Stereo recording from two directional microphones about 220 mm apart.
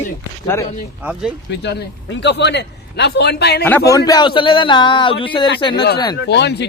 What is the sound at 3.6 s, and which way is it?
Speech, 5° left (ahead or behind).